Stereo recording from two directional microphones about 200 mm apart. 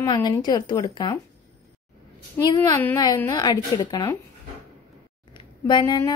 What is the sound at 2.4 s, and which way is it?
A woman's voice, 15° left (ahead or behind).